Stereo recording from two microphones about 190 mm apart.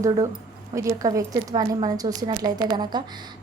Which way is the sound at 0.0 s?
15° right (ahead or behind).